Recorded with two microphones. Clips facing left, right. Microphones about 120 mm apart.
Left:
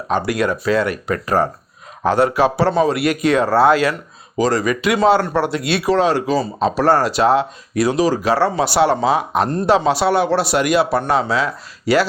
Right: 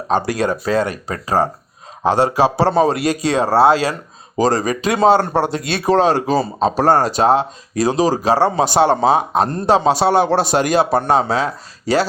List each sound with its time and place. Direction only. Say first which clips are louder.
0.1 s a man's voice: right 1 dB; 30° right (ahead or behind)
8.8 s a man's voice: right 1 dB; 25° right (ahead or behind)